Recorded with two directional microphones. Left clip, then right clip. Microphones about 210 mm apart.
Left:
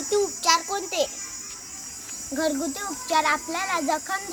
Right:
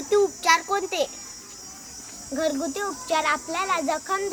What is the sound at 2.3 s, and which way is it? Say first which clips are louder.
A child's voice: right 1 dB; 15° right (ahead or behind).